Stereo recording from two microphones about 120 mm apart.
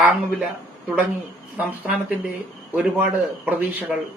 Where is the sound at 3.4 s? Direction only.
15° right (ahead or behind).